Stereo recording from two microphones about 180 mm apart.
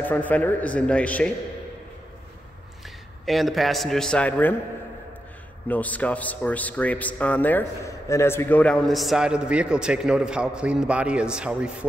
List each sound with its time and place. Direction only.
0.0 s a man's voice: 10° left (ahead or behind)
3.3 s a man's voice: centre (ahead or behind)
5.7 s a man's voice: 10° left (ahead or behind)